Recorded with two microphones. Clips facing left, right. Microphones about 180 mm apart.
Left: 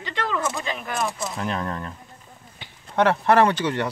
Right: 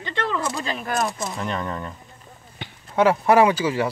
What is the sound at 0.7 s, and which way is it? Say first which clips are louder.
Speech: right 3 dB; 40° right (ahead or behind).